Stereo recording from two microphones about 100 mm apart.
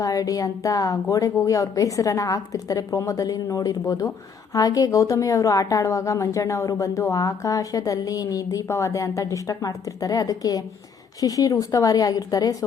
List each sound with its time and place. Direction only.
0.0 s a woman's voice: 35° left (ahead or behind)